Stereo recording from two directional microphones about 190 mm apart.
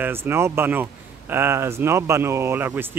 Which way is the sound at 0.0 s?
10° right (ahead or behind).